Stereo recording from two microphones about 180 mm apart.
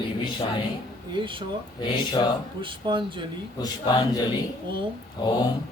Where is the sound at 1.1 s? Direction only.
25° right (ahead or behind).